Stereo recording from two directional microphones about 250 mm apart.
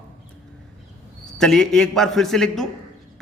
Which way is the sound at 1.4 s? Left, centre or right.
Centre.